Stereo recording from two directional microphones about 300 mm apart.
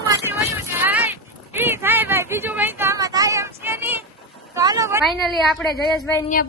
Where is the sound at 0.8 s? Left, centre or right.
Centre.